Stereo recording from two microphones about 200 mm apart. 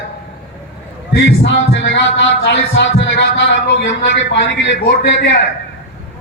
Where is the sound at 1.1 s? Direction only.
65° left (ahead or behind).